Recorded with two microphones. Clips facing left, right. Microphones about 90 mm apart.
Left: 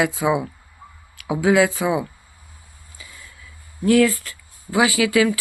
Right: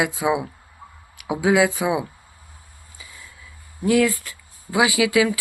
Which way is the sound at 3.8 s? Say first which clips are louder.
Left 2 dB; 10° right (ahead or behind).